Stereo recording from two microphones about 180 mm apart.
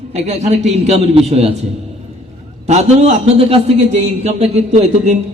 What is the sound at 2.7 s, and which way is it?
A man's voice, 40° right (ahead or behind).